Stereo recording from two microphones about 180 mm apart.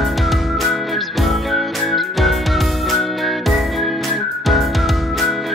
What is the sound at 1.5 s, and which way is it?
Music, centre (ahead or behind).